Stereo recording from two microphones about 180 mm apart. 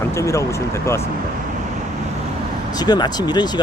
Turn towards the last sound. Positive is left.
turn(degrees=25)  # may be behind; listen again after turning